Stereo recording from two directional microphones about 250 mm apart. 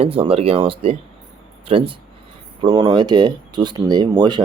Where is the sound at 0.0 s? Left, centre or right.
Right.